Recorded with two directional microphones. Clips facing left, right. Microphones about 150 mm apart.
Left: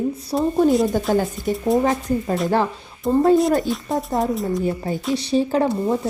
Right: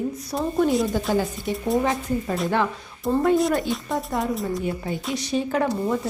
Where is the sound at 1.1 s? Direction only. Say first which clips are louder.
Left 3 dB; 50° left (ahead or behind).